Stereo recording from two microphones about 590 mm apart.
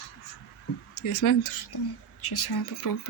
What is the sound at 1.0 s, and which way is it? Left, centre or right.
Speech, left.